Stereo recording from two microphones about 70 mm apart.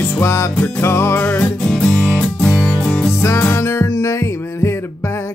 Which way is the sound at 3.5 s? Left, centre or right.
Left.